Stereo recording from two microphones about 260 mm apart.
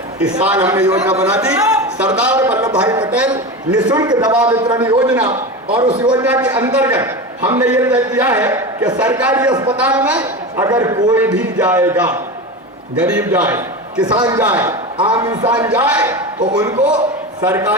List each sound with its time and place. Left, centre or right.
0.4 s a man's voice: centre
3.9 s a man's voice: centre
6.2 s a man's voice: centre